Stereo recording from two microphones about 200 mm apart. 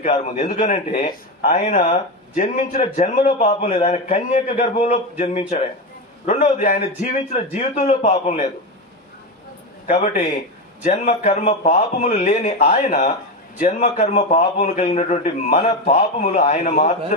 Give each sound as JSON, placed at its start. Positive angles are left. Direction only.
{"t": 0.0, "sound": "a man's voice", "side_deg": 35}
{"t": 9.8, "sound": "a man's voice", "side_deg": 35}